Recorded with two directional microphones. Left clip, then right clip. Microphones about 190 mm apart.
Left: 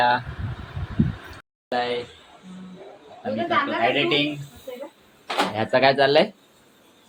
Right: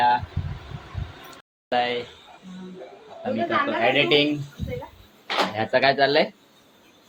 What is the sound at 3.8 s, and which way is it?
Speech, 5° right (ahead or behind).